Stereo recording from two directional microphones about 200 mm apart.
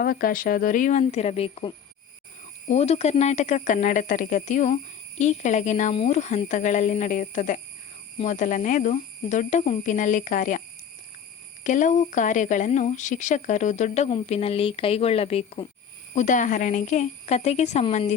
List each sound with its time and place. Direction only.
0.0 s speech: 45° left (ahead or behind)
11.6 s speech: 40° left (ahead or behind)